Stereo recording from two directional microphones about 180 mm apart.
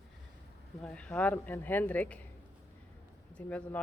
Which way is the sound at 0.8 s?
5° left (ahead or behind).